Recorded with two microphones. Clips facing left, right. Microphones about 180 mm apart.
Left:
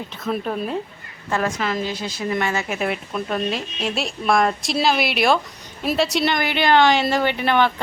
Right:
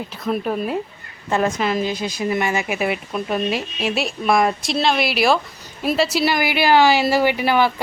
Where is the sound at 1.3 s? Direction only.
20° right (ahead or behind).